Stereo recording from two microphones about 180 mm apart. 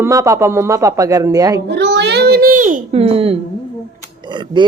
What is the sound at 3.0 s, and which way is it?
Speech, 30° right (ahead or behind).